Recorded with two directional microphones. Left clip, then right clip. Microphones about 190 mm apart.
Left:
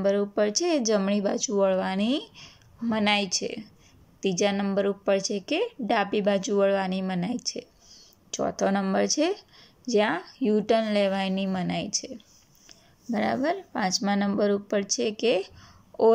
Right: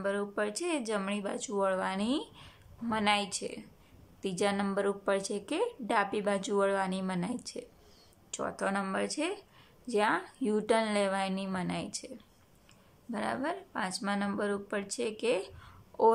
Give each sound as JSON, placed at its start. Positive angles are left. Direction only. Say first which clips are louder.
{"t": 0.0, "sound": "a woman's voice", "louder": "left 9 dB", "side_deg": 20}
{"t": 12.6, "sound": "a sound", "louder": "left 9 dB", "side_deg": 20}
{"t": 14.0, "sound": "a woman's voice", "louder": "left 7 dB", "side_deg": 20}